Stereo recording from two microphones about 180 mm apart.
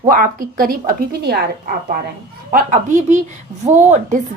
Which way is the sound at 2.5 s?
50° right (ahead or behind).